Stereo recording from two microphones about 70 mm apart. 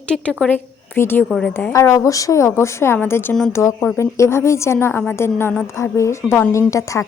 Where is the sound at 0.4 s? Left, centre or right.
Left.